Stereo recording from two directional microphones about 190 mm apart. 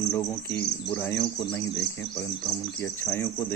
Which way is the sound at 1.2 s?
20° left (ahead or behind).